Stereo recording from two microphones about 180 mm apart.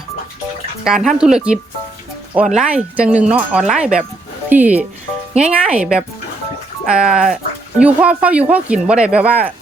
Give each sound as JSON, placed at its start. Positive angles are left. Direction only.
{"t": 0.9, "sound": "speech", "side_deg": -5}
{"t": 2.6, "sound": "speech", "side_deg": -5}